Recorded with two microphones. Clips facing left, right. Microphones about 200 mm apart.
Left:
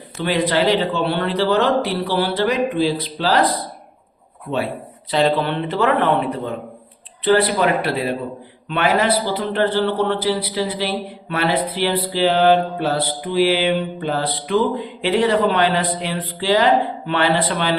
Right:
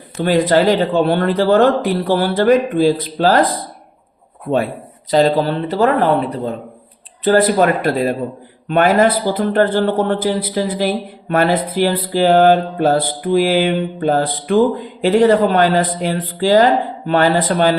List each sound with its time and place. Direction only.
0.2 s a man's voice: 45° right (ahead or behind)
5.1 s a man's voice: 40° right (ahead or behind)